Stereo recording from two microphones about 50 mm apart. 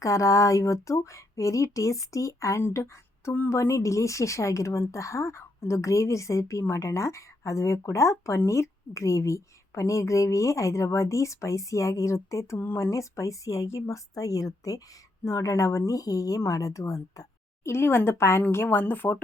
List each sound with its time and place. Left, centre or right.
0.0 s speech: left
2.7 s a woman's voice: left
3.5 s speech: left
12.5 s speech: left
12.8 s speech: left
15.2 s speech: left
17.6 s a woman's voice: left
18.5 s speech: left